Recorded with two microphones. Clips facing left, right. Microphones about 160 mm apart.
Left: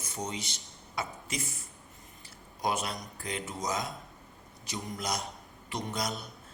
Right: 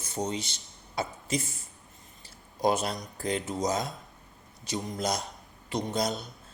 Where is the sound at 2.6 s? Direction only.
35° right (ahead or behind).